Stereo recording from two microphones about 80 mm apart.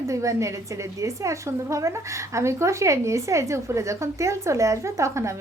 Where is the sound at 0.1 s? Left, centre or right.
Right.